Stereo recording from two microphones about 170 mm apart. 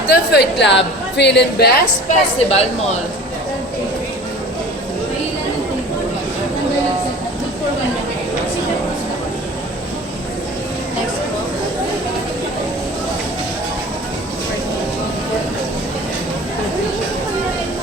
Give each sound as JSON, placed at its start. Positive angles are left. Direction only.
{"t": 0.1, "sound": "a woman's voice", "side_deg": 75}
{"t": 2.0, "sound": "a woman's voice", "side_deg": 40}